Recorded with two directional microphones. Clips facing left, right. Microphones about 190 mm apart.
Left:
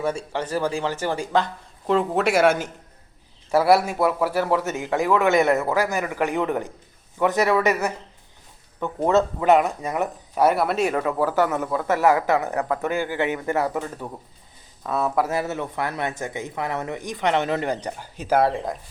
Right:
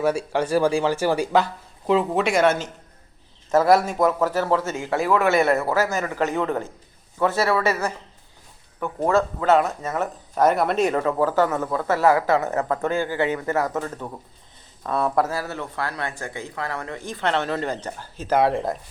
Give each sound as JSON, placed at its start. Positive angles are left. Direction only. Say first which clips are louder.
{"t": 0.0, "sound": "speech", "louder": "right 4 dB", "side_deg": -10}
{"t": 15.3, "sound": "speech", "louder": "left 3 dB", "side_deg": 20}
{"t": 18.3, "sound": "speech", "louder": "right 1 dB", "side_deg": 0}